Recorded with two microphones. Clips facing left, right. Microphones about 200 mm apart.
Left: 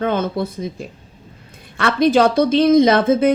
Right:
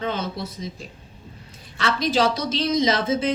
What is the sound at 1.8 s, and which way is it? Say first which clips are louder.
Speech: left 7 dB; 55° left (ahead or behind).